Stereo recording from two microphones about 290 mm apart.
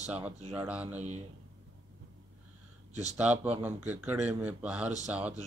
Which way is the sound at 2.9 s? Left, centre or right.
Right.